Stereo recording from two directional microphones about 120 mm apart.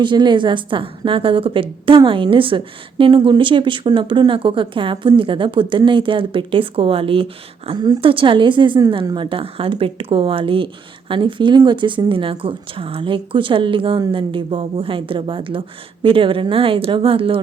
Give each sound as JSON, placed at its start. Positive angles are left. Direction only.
{"t": 0.0, "sound": "speech", "side_deg": -40}